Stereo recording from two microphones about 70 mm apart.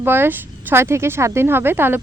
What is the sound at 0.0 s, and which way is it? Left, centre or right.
Speech, right.